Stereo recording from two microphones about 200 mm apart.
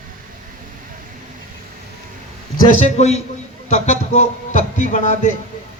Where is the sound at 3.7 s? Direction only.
35° left (ahead or behind).